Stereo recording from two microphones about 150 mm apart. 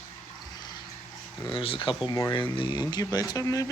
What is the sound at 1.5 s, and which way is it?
Speech, 35° left (ahead or behind).